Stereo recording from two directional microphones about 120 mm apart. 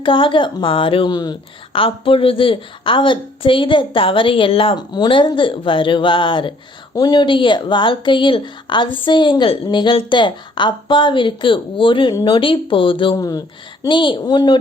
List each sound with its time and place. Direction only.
0.0 s speech: 45° left (ahead or behind)
13.1 s speech: 30° left (ahead or behind)
13.8 s speech: 40° left (ahead or behind)